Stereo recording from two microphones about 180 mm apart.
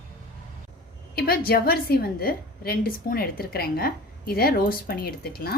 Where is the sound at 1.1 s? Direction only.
55° left (ahead or behind).